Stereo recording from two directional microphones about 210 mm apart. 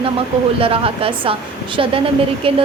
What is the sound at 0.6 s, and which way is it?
A woman's voice, 25° right (ahead or behind).